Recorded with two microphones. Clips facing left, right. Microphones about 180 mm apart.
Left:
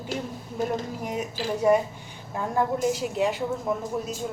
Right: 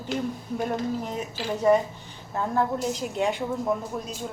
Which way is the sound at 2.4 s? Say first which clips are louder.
Even; 10° left (ahead or behind).